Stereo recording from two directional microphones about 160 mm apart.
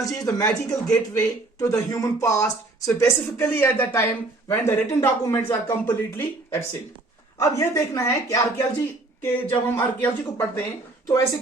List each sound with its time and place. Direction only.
0.0 s speech: 20° left (ahead or behind)
0.7 s speech: 5° left (ahead or behind)
1.5 s speech: 20° left (ahead or behind)